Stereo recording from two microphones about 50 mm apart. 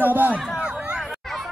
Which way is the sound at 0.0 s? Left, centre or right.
Right.